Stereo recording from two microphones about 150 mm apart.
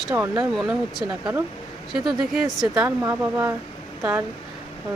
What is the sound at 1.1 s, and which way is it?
Speech, 15° right (ahead or behind).